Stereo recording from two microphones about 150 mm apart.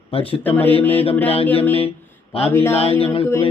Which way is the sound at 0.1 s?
40° left (ahead or behind).